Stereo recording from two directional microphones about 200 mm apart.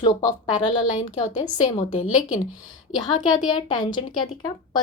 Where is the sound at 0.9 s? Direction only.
35° left (ahead or behind).